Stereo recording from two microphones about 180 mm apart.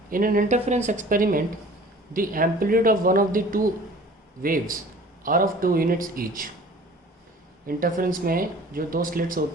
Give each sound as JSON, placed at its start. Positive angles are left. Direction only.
{"t": 0.1, "sound": "speech", "side_deg": -50}
{"t": 7.7, "sound": "speech", "side_deg": -50}